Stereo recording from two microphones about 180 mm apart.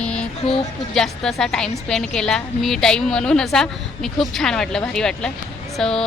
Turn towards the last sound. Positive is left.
turn(degrees=5)  # may be behind; listen again after turning